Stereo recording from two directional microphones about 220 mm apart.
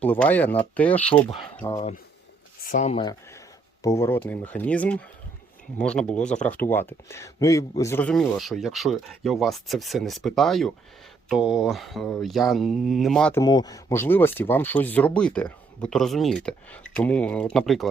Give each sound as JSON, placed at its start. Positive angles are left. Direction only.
{"t": 0.0, "sound": "speech", "side_deg": 5}
{"t": 1.7, "sound": "speech", "side_deg": 25}
{"t": 3.8, "sound": "speech", "side_deg": 15}
{"t": 13.4, "sound": "speech", "side_deg": 15}